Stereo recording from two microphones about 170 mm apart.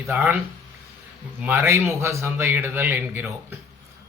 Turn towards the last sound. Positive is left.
turn(degrees=-15)  # may be behind; listen again after turning